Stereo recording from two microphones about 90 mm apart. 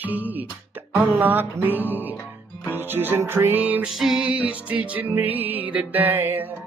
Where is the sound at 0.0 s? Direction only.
20° right (ahead or behind).